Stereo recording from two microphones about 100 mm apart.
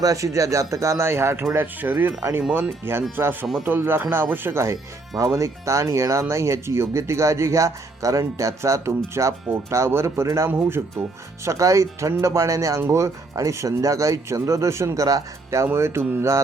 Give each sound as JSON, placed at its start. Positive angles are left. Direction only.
{"t": 0.0, "sound": "speech", "side_deg": -35}
{"t": 11.4, "sound": "speech", "side_deg": -30}